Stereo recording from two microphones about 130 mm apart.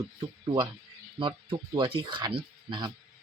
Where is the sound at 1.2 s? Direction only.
40° right (ahead or behind).